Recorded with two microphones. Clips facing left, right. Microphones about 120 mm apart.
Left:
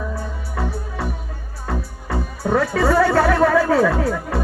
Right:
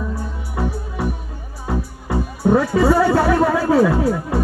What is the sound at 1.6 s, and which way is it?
Speech, 15° right (ahead or behind).